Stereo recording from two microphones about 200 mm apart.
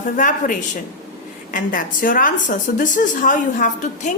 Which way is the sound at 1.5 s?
45° left (ahead or behind).